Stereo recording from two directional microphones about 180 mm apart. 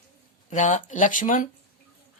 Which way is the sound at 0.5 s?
40° left (ahead or behind).